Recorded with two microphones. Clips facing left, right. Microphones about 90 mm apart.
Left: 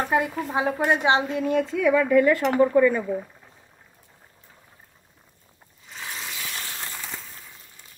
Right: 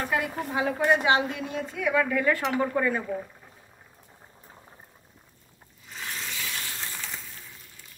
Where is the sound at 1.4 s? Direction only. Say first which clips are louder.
Left 9 dB; 55° left (ahead or behind).